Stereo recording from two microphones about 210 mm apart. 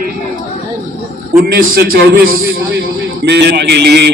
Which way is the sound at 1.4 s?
45° right (ahead or behind).